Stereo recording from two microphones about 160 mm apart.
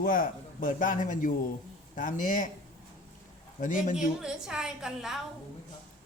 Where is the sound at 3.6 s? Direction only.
55° left (ahead or behind).